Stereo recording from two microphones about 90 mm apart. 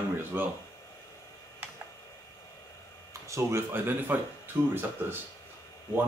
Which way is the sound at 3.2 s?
30° right (ahead or behind).